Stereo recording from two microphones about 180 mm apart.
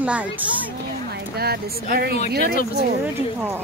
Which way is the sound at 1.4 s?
60° right (ahead or behind).